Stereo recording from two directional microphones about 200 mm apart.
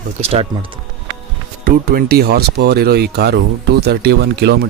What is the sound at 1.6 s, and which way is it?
Speech, 45° right (ahead or behind).